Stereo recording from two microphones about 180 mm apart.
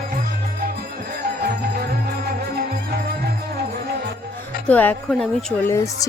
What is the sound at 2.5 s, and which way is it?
Music, 60° right (ahead or behind).